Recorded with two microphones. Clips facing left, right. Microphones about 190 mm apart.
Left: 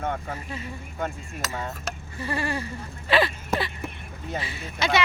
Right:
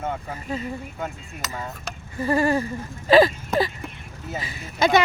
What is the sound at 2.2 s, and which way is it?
Speech, 45° right (ahead or behind).